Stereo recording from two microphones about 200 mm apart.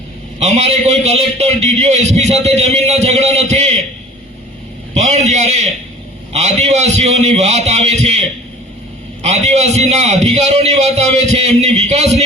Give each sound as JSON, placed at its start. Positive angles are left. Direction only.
{"t": 0.3, "sound": "a man's voice", "side_deg": -35}
{"t": 4.9, "sound": "a man's voice", "side_deg": -35}